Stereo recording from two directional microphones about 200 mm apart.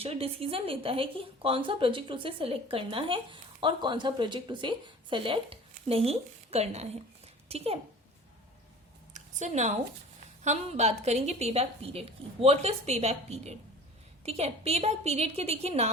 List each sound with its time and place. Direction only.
0.0 s a woman's voice: 30° right (ahead or behind)
9.1 s a woman's voice: 35° right (ahead or behind)